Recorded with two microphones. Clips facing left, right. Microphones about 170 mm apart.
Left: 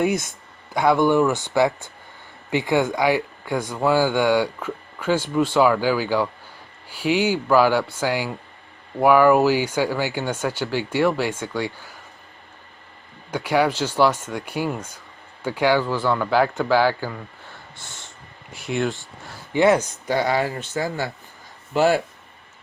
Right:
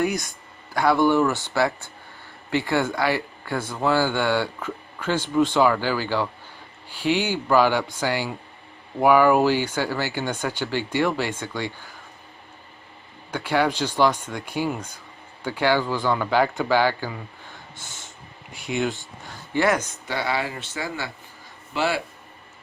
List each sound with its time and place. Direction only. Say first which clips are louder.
0.0 s speech: left 3 dB; 25° left (ahead or behind); by 11.9 s 10° left (ahead or behind)
13.3 s speech: left 2 dB; 10° left (ahead or behind)
17.5 s snort: even; centre (ahead or behind)
18.5 s speech: left 1 dB; centre (ahead or behind)
19.5 s speech: left 5 dB; 25° left (ahead or behind)
20.1 s speech: left 5 dB; 45° left (ahead or behind)